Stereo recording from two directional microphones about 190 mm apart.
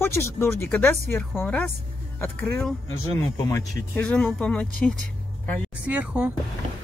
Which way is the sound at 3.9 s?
5° left (ahead or behind).